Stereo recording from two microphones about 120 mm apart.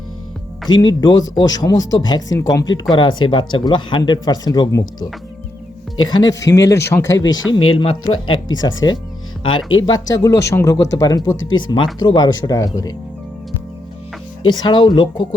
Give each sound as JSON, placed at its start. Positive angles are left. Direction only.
{"t": 0.7, "sound": "speech", "side_deg": 35}
{"t": 6.1, "sound": "speech", "side_deg": 35}
{"t": 7.5, "sound": "speech", "side_deg": 40}
{"t": 14.6, "sound": "speech", "side_deg": 35}